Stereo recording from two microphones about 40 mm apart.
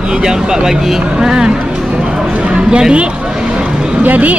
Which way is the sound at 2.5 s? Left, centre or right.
Right.